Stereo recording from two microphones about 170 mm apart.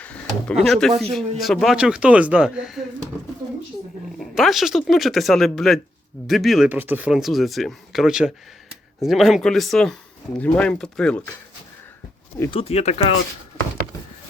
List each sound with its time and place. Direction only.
0.0 s speech: 5° left (ahead or behind)
4.2 s speech: centre (ahead or behind)
6.7 s speech: 10° right (ahead or behind); by 11.2 s 5° left (ahead or behind)
12.5 s speech: 35° left (ahead or behind)